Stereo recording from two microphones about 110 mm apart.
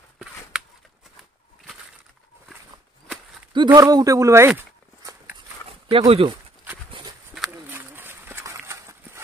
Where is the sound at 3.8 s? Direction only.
35° right (ahead or behind).